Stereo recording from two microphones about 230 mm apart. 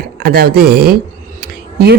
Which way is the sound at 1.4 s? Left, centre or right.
Right.